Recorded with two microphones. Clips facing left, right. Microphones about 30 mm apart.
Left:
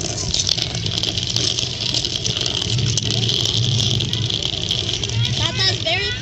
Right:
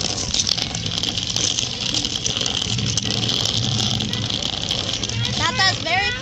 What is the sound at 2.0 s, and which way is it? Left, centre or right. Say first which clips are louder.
Vehicle: left 1 dB; left.